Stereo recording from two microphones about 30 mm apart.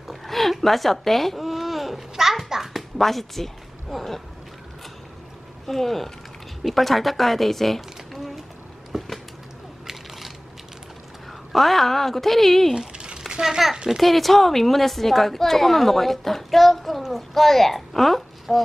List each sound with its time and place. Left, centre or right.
0.1 s a sound: centre
1.4 s babbling: centre
3.0 s a woman's voice: centre
5.8 s a woman's voice: centre
8.9 s a sound: centre
11.5 s a woman's voice: centre
12.9 s a sound: right
13.3 s a child's voice: right
14.0 s a woman's voice: centre